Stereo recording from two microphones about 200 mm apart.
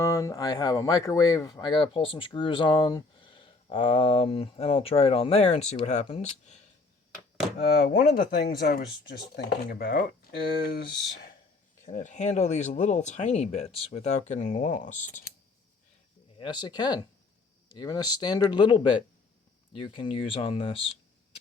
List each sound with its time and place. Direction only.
0.0 s speech: 15° left (ahead or behind); by 6.6 s 35° left (ahead or behind)
7.6 s speech: 50° left (ahead or behind)
11.9 s speech: 40° left (ahead or behind)
16.4 s speech: 20° left (ahead or behind)